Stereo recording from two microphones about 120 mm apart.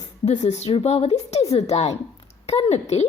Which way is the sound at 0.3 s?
65° left (ahead or behind).